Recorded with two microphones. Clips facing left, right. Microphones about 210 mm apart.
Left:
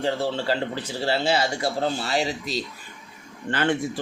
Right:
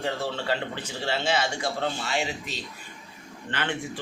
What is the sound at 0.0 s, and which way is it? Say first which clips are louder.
A man's voice: left 5 dB; 30° left (ahead or behind).